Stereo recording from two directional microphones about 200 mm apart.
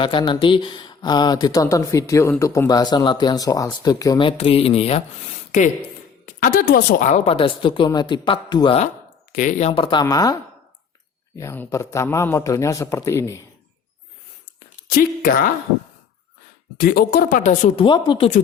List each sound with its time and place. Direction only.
0.0 s speech: 25° left (ahead or behind)
9.3 s a man's voice: 40° left (ahead or behind); by 13.4 s 15° left (ahead or behind)
14.8 s speech: 50° left (ahead or behind)
16.7 s speech: 50° left (ahead or behind)
17.8 s speech: 25° left (ahead or behind)